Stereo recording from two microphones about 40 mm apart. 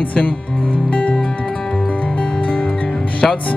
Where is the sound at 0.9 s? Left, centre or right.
Left.